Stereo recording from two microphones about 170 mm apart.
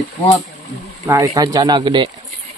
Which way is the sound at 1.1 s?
20° right (ahead or behind).